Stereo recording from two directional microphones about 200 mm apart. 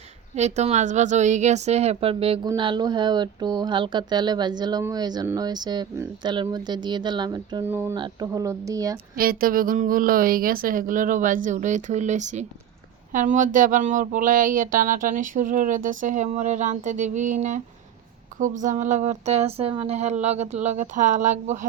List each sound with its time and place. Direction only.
0.3 s speech: 35° right (ahead or behind)
7.6 s speech: 10° right (ahead or behind)
7.9 s speech: 20° right (ahead or behind)
9.1 s speech: 45° right (ahead or behind)